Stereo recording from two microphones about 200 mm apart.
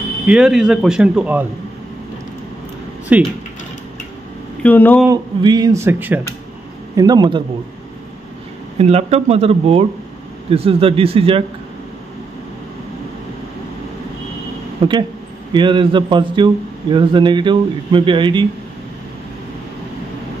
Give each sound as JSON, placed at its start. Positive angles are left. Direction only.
{"t": 0.3, "sound": "a man's voice", "side_deg": -5}
{"t": 3.1, "sound": "speech", "side_deg": -5}
{"t": 4.6, "sound": "speech", "side_deg": 10}
{"t": 5.0, "sound": "speech", "side_deg": -20}
{"t": 7.0, "sound": "speech", "side_deg": -20}
{"t": 8.7, "sound": "speech", "side_deg": -30}
{"t": 14.8, "sound": "speech", "side_deg": -20}